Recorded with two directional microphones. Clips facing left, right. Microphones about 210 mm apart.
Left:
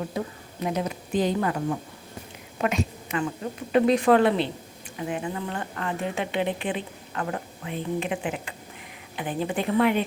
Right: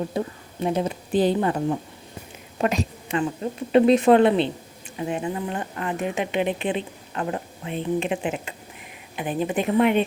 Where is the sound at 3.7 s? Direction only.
25° right (ahead or behind).